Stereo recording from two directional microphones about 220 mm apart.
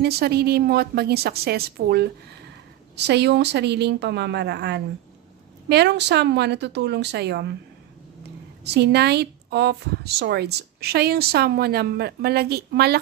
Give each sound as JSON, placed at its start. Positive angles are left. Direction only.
{"t": 0.0, "sound": "speech", "side_deg": -45}
{"t": 8.6, "sound": "speech", "side_deg": -50}